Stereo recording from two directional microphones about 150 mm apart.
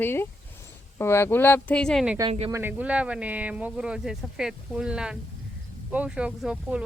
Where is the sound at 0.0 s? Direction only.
15° left (ahead or behind).